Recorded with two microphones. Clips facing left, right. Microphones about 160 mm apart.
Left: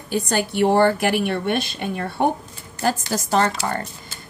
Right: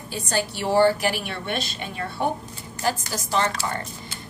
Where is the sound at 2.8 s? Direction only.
50° left (ahead or behind).